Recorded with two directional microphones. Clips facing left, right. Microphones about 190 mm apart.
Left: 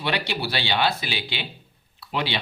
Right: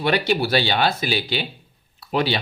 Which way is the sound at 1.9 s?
45° right (ahead or behind).